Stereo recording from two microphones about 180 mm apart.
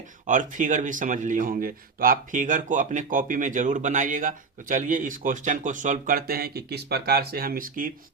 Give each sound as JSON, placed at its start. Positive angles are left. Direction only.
{"t": 0.3, "sound": "a man's voice", "side_deg": -45}